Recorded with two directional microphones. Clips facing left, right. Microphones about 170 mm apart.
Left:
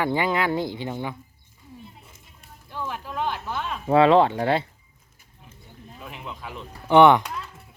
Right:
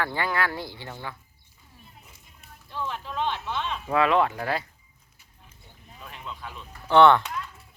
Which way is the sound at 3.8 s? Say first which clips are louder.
Left 6 dB; 30° left (ahead or behind).